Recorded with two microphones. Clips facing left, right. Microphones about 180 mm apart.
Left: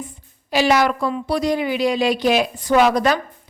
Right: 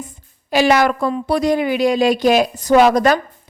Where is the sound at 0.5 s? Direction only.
50° right (ahead or behind).